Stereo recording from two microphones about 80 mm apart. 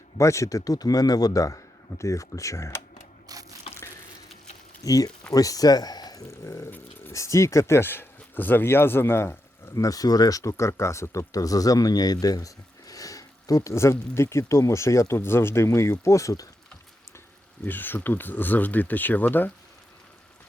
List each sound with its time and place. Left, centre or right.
0.2 s a man's voice: left
3.3 s crushing: right
4.8 s a man's voice: left
6.3 s speech: left
6.7 s speech: left
7.1 s speech: left
17.7 s speech: left